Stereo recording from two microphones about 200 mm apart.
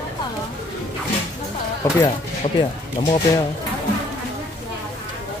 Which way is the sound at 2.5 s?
25° left (ahead or behind).